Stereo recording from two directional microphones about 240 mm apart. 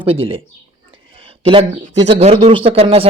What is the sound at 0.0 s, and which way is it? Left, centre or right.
Speech, right.